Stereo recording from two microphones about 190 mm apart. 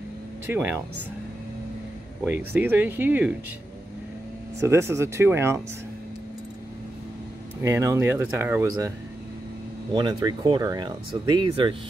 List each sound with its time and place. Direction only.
0.5 s speech: 10° right (ahead or behind)
2.2 s speech: 10° right (ahead or behind)
4.6 s speech: 15° right (ahead or behind)
7.6 s speech: 15° right (ahead or behind)
9.9 s speech: 20° right (ahead or behind)